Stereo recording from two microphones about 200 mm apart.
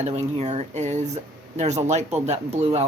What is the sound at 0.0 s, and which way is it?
Speech, 35° right (ahead or behind).